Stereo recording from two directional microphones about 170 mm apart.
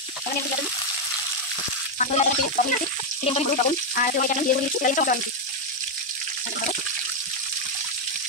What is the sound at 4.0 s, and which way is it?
Speech, 55° left (ahead or behind).